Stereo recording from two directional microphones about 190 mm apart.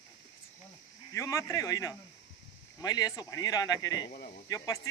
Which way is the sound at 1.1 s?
15° left (ahead or behind).